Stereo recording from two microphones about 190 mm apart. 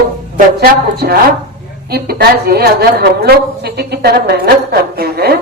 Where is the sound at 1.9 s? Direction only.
55° right (ahead or behind).